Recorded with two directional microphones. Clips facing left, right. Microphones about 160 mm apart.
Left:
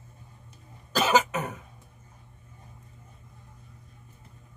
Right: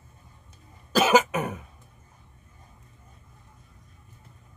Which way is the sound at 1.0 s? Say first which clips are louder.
Right 3 dB; 10° right (ahead or behind).